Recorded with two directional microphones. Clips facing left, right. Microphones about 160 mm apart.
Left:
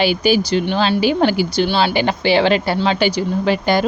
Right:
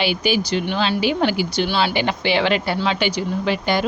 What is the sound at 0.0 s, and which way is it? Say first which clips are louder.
Speech: left 5 dB; 40° left (ahead or behind).